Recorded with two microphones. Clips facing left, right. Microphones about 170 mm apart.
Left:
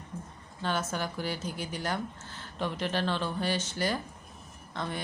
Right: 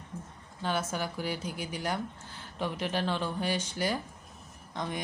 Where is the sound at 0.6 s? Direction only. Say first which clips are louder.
Even; 10° right (ahead or behind).